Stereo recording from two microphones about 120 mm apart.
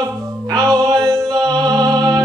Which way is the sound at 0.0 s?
35° right (ahead or behind).